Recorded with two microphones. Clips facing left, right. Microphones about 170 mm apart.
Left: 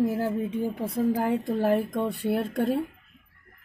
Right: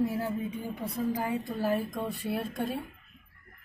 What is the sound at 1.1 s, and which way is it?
Speech, 85° left.